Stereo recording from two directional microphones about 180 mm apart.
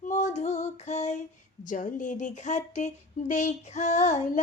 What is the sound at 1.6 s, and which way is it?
Speech, 45° left (ahead or behind).